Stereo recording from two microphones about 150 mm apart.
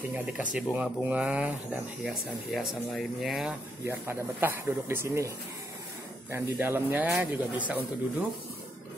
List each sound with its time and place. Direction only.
0.1 s a man's voice: 10° right (ahead or behind)
3.8 s a man's voice: 15° right (ahead or behind)
6.3 s a man's voice: 15° right (ahead or behind)